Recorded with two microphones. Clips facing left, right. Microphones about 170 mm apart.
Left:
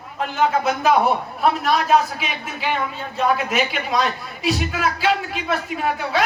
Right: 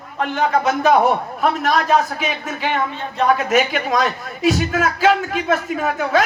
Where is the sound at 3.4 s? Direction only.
45° right (ahead or behind).